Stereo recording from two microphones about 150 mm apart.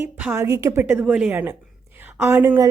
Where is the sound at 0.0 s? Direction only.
15° right (ahead or behind).